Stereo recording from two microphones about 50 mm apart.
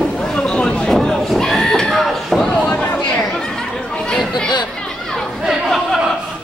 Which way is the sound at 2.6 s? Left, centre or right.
Left.